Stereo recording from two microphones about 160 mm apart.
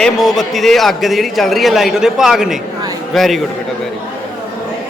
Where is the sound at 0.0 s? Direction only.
Centre (ahead or behind).